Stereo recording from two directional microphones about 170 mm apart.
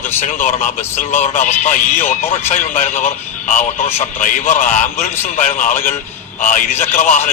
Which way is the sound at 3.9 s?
45° left (ahead or behind).